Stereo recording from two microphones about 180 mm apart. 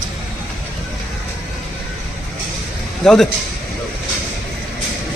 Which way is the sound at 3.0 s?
5° left (ahead or behind).